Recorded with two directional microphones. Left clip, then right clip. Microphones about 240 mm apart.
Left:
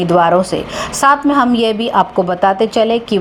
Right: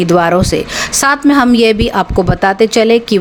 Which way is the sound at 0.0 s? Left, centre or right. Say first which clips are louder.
Right 1 dB; right.